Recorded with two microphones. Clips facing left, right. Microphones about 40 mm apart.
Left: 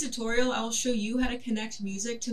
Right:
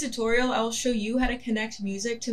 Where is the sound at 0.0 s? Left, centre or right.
Right.